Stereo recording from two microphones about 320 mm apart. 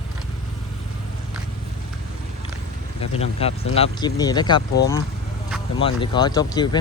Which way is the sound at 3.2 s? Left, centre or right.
Centre.